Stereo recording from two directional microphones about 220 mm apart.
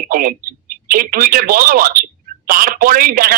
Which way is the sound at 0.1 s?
40° right (ahead or behind).